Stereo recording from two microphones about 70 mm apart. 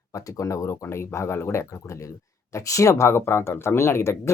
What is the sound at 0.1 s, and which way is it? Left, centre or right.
Speech, left.